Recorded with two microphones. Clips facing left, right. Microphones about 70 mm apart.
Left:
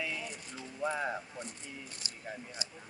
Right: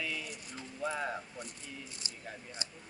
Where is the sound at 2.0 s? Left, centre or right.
Right.